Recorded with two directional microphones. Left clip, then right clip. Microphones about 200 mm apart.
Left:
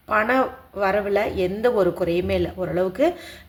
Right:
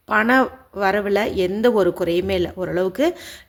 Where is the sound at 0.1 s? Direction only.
35° right (ahead or behind).